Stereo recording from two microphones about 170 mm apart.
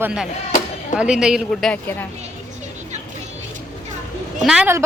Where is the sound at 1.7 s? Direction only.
10° left (ahead or behind).